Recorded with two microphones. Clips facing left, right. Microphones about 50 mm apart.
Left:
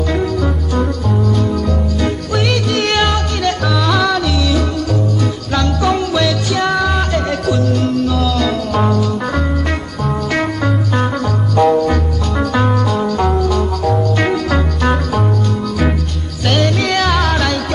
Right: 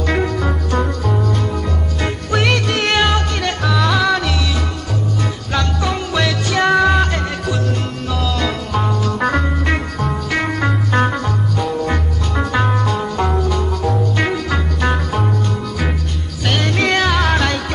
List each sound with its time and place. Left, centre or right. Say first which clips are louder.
0.2 s music: left 2 dB; right
2.3 s music: right 2 dB; right
2.8 s music: left 1 dB; centre
5.5 s music: left 3 dB; centre
6.1 s music: left 2 dB; right
12.4 s music: left 2 dB; centre
16.4 s music: left 4 dB; centre
16.7 s music: left 1 dB; right